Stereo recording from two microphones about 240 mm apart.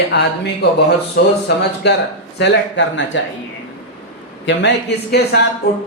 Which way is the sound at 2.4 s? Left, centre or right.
Left.